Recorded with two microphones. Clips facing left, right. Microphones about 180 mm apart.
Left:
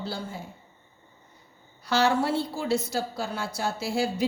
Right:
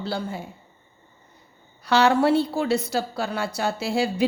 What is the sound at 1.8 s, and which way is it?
A woman's voice, 65° right (ahead or behind).